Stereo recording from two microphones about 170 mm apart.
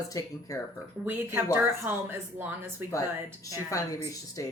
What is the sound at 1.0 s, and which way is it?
Speech, 15° right (ahead or behind).